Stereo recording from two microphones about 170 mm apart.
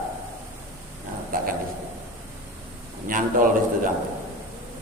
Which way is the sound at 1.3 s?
55° right (ahead or behind).